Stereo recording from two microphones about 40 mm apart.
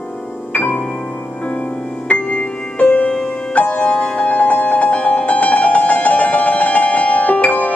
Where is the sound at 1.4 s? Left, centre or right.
Left.